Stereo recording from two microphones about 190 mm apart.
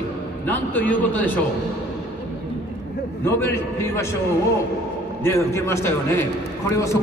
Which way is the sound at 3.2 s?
15° left (ahead or behind).